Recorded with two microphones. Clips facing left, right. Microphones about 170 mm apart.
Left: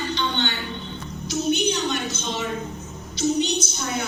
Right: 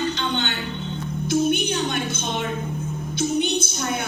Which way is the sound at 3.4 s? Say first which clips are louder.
Right 1 dB; 55° right (ahead or behind).